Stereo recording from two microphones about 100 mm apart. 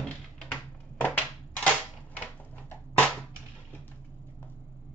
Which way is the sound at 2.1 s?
15° left (ahead or behind).